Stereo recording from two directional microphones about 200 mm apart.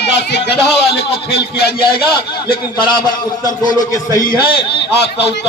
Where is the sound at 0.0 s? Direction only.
55° left (ahead or behind).